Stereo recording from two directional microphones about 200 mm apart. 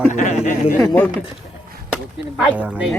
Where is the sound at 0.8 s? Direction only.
10° left (ahead or behind); by 2.9 s 5° right (ahead or behind).